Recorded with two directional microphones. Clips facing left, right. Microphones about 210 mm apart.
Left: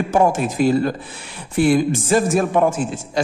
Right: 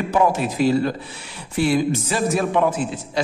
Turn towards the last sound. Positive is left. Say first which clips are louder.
# left 2 dB
turn(degrees=45)  # may be behind; listen again after turning